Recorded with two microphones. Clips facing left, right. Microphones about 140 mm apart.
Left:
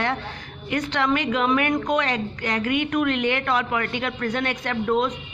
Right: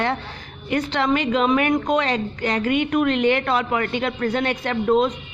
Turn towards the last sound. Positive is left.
turn(degrees=-25)  # may be behind; listen again after turning